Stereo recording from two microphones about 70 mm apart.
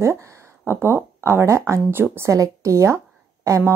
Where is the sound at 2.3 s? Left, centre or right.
Right.